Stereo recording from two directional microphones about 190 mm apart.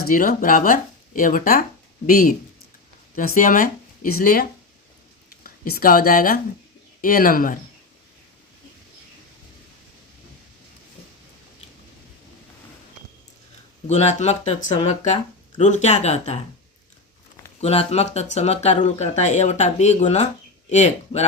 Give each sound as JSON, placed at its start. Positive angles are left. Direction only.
{"t": 0.1, "sound": "speech", "side_deg": 45}
{"t": 13.8, "sound": "speech", "side_deg": 35}
{"t": 17.6, "sound": "speech", "side_deg": 35}